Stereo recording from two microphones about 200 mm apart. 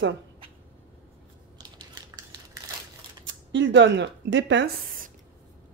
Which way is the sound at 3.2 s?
65° right (ahead or behind).